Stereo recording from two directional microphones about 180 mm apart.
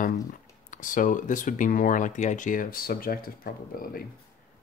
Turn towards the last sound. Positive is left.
turn(degrees=55)  # may be behind; listen again after turning